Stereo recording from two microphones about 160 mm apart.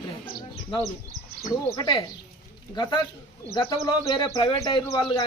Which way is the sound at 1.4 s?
25° left (ahead or behind).